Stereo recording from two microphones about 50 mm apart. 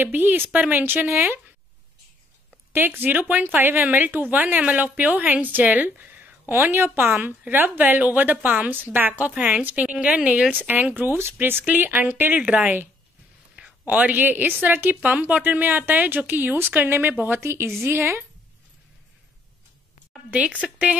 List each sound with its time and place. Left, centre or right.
0.0 s speech: right
0.5 s a woman's voice: right
0.7 s speech: right
2.7 s a woman's voice: right
12.4 s speech: right
13.8 s a woman's voice: right
15.0 s a woman's voice: right
17.4 s a woman's voice: right
20.2 s speech: right